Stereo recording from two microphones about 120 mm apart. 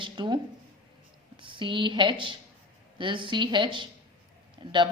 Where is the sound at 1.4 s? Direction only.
45° right (ahead or behind).